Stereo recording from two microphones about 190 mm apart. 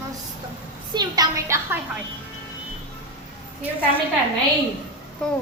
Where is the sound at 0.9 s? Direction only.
20° right (ahead or behind).